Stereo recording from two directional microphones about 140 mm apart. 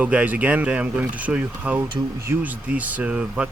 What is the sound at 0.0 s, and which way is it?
Speech, 10° right (ahead or behind).